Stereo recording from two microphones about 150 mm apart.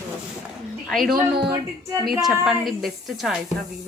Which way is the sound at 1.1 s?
90° right.